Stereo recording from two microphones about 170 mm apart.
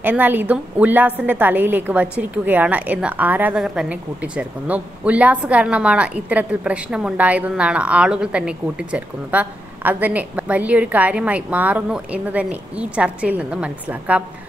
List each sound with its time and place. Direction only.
0.0 s a woman's voice: 10° right (ahead or behind)